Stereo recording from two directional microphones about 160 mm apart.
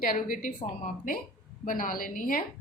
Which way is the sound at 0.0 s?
60° left (ahead or behind).